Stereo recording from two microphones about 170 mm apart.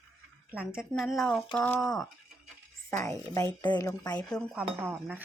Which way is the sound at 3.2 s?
15° left (ahead or behind).